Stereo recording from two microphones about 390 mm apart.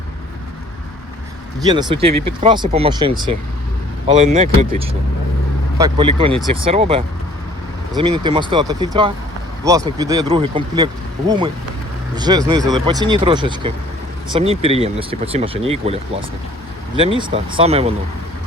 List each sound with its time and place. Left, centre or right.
1.6 s speech: centre
17.0 s speech: centre